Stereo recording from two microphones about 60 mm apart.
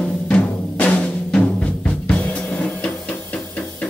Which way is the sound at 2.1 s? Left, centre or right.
Centre.